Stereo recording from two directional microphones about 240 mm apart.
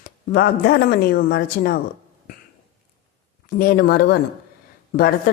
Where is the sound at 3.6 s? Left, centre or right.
Left.